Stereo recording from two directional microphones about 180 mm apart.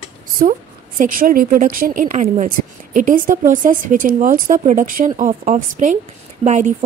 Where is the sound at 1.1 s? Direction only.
50° right (ahead or behind).